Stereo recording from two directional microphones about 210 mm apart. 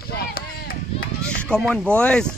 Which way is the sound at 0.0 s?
45° left (ahead or behind).